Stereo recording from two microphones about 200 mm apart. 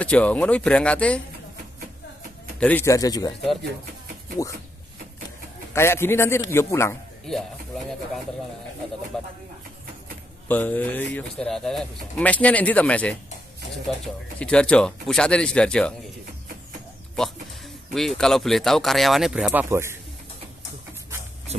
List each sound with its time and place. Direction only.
0.0 s speech: 5° left (ahead or behind)
2.6 s speech: 10° left (ahead or behind)
5.7 s speech: 10° left (ahead or behind)
7.2 s speech: centre (ahead or behind)
10.5 s speech: 10° left (ahead or behind)
17.9 s speech: centre (ahead or behind)